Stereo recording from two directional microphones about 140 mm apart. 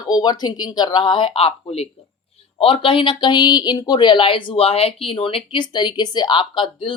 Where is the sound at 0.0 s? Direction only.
30° left (ahead or behind).